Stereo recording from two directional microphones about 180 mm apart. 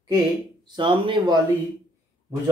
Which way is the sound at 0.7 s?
30° right (ahead or behind).